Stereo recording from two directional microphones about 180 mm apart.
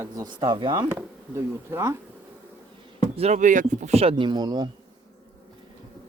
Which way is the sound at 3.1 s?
40° right (ahead or behind).